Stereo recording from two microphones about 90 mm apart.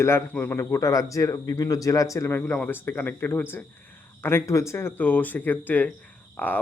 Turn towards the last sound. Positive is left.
turn(degrees=20)  # may be behind; listen again after turning